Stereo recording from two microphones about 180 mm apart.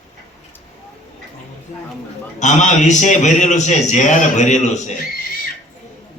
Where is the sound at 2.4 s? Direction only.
40° left (ahead or behind).